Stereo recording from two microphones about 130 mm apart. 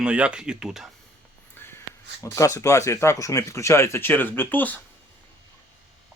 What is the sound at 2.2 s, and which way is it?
Speech, 25° left (ahead or behind).